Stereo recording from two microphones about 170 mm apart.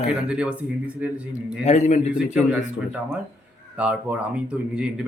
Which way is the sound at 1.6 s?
45° left (ahead or behind).